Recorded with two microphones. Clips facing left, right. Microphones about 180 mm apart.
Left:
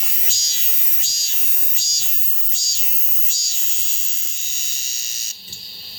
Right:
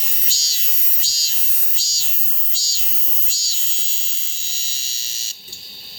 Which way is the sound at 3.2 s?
35° right (ahead or behind).